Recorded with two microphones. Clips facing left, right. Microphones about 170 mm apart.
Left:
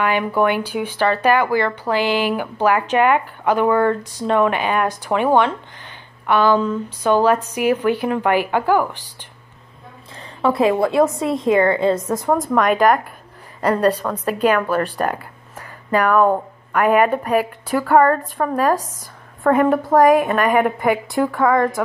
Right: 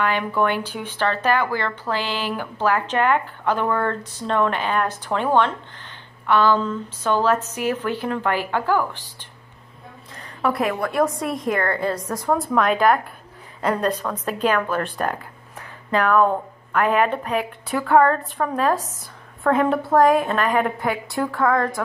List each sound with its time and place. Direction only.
0.4 s speech: 10° left (ahead or behind)
10.1 s a sound: 25° left (ahead or behind)
10.8 s a woman's voice: 25° left (ahead or behind)
12.5 s a woman's voice: 10° left (ahead or behind)
21.4 s speech: centre (ahead or behind)